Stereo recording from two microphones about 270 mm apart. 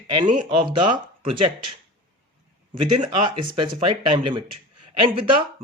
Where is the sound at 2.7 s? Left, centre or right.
Right.